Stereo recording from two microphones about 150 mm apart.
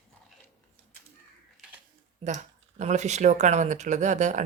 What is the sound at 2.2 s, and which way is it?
Speech, 50° right (ahead or behind).